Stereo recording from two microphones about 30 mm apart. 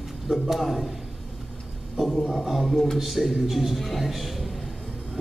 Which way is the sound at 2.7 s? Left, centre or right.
Centre.